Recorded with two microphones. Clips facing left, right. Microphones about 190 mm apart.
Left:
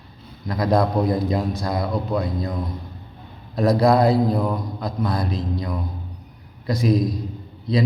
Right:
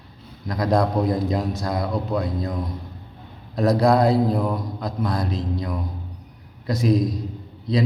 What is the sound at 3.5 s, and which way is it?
A man's voice, centre (ahead or behind).